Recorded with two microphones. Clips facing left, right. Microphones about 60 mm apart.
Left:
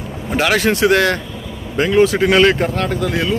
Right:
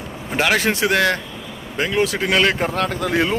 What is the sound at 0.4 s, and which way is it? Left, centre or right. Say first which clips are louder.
Speech: left 3 dB; centre.